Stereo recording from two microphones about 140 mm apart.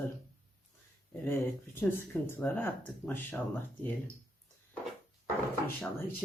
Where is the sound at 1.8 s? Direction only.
15° left (ahead or behind).